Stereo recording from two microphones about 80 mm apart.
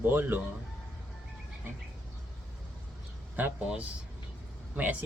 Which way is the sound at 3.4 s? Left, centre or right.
Centre.